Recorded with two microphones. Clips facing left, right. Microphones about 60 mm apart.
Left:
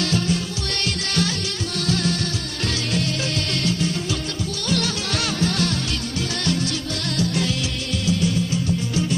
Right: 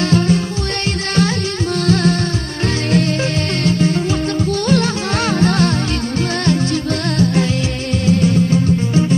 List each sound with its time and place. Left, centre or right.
0.0 s music: right
1.9 s music: right
3.6 s music: right